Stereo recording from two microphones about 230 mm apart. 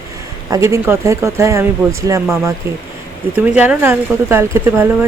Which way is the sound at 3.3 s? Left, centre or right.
Centre.